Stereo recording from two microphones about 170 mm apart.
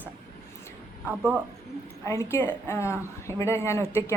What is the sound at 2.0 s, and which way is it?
Speech, 15° left (ahead or behind).